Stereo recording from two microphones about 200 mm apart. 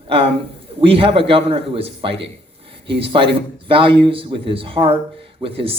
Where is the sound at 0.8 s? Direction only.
25° right (ahead or behind).